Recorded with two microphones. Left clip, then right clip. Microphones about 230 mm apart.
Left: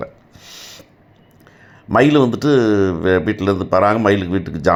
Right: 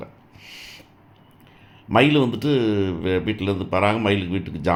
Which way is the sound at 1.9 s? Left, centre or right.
Left.